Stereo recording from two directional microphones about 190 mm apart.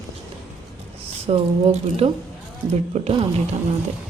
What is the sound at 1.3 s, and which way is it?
A woman's voice, 30° right (ahead or behind).